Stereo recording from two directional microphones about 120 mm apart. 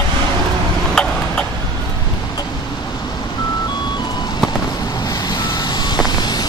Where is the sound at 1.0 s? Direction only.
5° left (ahead or behind).